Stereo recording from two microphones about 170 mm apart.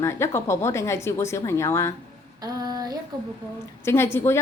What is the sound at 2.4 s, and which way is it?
Female singing, 20° right (ahead or behind).